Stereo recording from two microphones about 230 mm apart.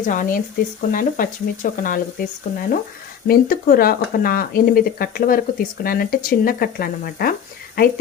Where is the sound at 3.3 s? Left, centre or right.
Left.